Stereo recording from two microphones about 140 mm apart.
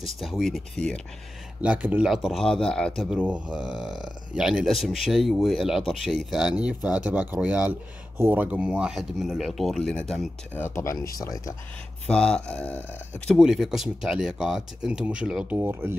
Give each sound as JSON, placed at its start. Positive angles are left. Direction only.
{"t": 0.0, "sound": "speech", "side_deg": 0}
{"t": 1.6, "sound": "speech", "side_deg": -10}
{"t": 3.0, "sound": "speech", "side_deg": -5}
{"t": 10.5, "sound": "speech", "side_deg": 15}
{"t": 12.1, "sound": "speech", "side_deg": 5}
{"t": 13.4, "sound": "speech", "side_deg": -5}